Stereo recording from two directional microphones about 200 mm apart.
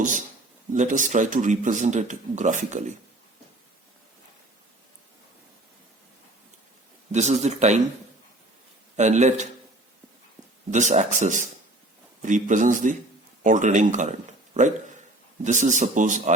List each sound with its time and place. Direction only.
0.0 s speech: 40° right (ahead or behind)
7.1 s speech: 35° right (ahead or behind)
9.0 s speech: 35° right (ahead or behind)
10.7 s speech: 35° right (ahead or behind)
15.4 s speech: 40° right (ahead or behind)